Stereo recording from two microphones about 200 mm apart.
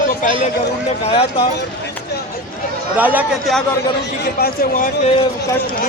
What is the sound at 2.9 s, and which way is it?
Speech, 10° right (ahead or behind).